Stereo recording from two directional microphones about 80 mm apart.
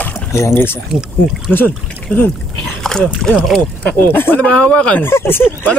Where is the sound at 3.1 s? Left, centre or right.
Centre.